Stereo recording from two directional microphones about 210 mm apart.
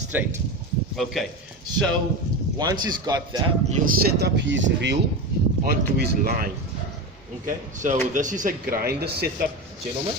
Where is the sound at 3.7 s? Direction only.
45° right (ahead or behind).